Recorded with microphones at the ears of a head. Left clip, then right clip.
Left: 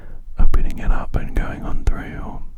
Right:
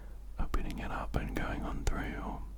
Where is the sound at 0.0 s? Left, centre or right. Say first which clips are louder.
Left 11 dB; left.